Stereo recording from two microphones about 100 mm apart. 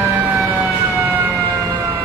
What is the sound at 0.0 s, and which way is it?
Emergency vehicle, 15° right (ahead or behind).